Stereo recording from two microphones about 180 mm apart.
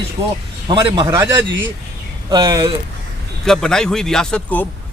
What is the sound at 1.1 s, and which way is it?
A man's voice, 15° right (ahead or behind).